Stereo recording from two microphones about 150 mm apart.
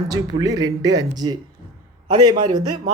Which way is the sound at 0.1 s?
25° right (ahead or behind).